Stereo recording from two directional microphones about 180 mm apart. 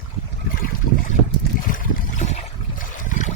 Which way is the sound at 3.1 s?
45° left (ahead or behind).